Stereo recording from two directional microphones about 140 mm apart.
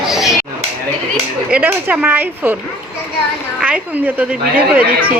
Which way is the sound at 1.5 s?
10° right (ahead or behind).